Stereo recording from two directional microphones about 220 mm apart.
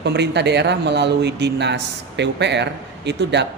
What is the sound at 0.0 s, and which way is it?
A man's voice, 50° right (ahead or behind).